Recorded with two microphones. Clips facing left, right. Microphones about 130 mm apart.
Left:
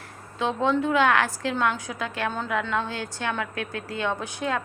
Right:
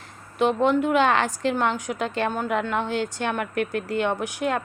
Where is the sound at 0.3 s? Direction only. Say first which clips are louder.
Right 4 dB; 15° right (ahead or behind).